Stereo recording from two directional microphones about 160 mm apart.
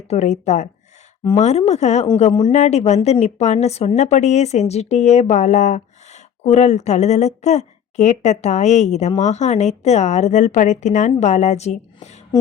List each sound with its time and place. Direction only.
0.1 s speech: 45° left (ahead or behind)